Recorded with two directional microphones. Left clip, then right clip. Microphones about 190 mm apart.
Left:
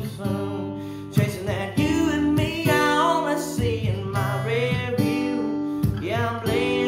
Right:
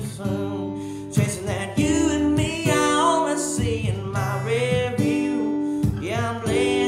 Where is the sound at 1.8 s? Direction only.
Centre (ahead or behind).